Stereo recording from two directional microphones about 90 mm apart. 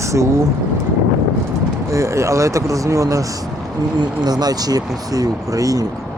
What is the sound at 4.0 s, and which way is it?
Speech, 50° right (ahead or behind).